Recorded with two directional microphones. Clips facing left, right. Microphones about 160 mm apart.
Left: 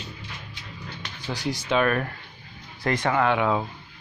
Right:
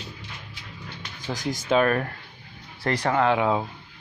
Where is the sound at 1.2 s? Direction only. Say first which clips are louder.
Right 1 dB; 45° right (ahead or behind); by 3.6 s 30° right (ahead or behind).